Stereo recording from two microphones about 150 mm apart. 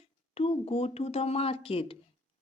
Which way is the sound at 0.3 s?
40° left (ahead or behind).